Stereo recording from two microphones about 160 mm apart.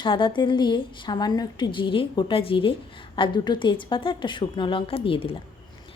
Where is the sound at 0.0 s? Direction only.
30° left (ahead or behind).